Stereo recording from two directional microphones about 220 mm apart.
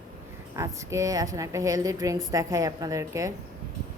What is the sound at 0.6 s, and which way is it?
A woman's voice, 15° right (ahead or behind).